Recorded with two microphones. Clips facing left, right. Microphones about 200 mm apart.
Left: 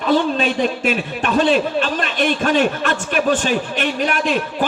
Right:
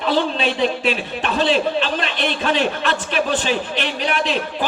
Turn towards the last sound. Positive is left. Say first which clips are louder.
# left 2 dB
turn(degrees=50)  # may be behind; listen again after turning